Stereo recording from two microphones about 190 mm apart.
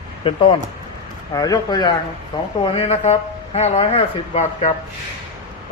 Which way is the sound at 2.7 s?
35° left (ahead or behind).